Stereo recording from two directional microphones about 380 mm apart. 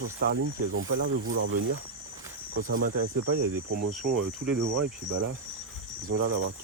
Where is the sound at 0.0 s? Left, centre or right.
Right.